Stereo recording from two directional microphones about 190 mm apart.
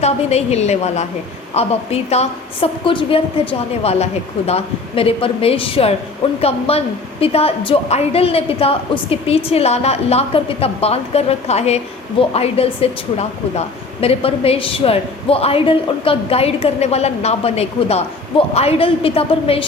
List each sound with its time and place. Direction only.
0.0 s a woman's voice: 35° left (ahead or behind)